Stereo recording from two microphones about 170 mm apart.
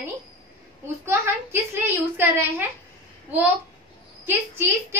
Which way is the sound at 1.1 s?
15° right (ahead or behind).